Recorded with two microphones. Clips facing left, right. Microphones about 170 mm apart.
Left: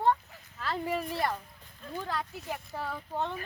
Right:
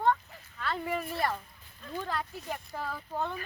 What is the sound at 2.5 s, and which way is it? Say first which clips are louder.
Speech: left 1 dB; 5° left (ahead or behind).